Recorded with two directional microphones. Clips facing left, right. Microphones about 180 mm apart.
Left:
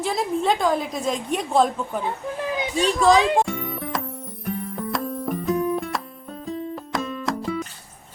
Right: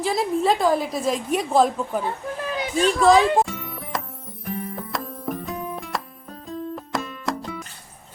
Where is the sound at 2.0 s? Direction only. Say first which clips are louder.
Left 1 dB; 20° left (ahead or behind).